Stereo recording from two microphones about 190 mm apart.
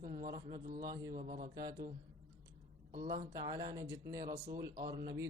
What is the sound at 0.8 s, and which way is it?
Speech, 20° right (ahead or behind).